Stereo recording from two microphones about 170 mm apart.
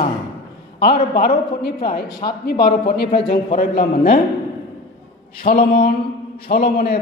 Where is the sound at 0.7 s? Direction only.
65° left (ahead or behind).